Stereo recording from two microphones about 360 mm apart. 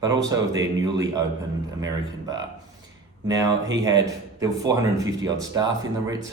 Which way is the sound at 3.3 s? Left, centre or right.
Centre.